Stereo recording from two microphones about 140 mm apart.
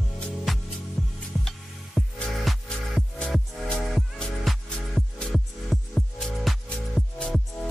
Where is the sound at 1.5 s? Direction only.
Centre (ahead or behind).